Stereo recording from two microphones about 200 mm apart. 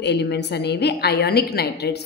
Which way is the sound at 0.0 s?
60° left (ahead or behind).